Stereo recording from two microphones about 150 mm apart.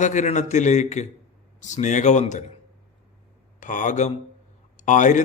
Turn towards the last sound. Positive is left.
turn(degrees=55)  # may be behind; listen again after turning